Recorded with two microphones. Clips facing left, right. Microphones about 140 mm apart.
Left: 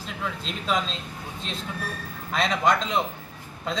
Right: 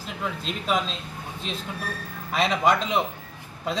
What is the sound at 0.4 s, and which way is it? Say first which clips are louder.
Speech: right 1 dB; 5° right (ahead or behind).